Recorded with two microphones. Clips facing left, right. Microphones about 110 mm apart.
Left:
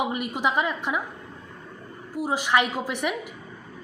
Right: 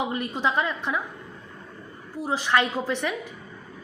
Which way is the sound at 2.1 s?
15° left (ahead or behind).